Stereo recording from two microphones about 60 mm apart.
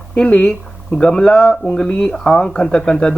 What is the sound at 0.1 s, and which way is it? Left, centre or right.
Speech, left.